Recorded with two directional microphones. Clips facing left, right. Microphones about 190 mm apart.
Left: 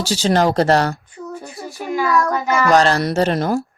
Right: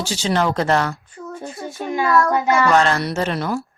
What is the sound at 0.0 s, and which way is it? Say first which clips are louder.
Speech: left 4 dB; 40° left (ahead or behind).